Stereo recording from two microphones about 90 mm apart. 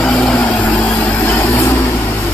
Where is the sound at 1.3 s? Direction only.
35° left (ahead or behind).